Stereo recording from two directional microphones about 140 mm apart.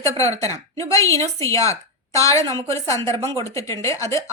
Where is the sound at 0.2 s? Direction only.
20° left (ahead or behind).